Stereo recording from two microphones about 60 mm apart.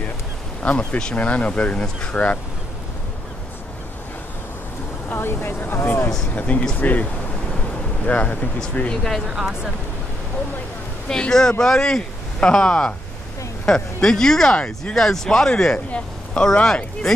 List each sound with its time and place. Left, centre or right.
0.6 s speech: centre
5.1 s speech: left
6.3 s speech: left
9.3 s speech: centre
11.1 s speech: centre
14.0 s speech: centre